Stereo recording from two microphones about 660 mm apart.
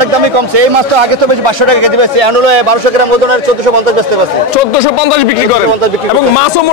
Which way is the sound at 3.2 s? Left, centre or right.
Right.